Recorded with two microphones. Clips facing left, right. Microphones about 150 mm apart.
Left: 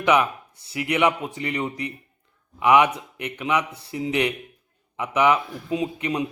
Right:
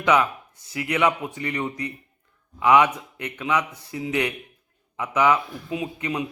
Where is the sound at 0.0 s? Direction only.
20° left (ahead or behind).